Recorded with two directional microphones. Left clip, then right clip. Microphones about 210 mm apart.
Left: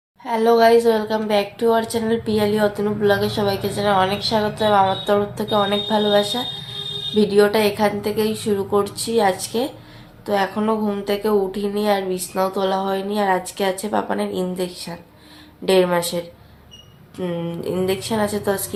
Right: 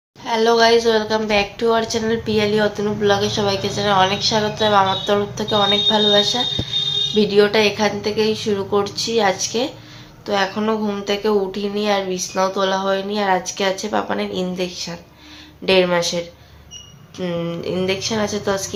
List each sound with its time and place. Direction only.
0.3 s a woman's voice: 5° left (ahead or behind)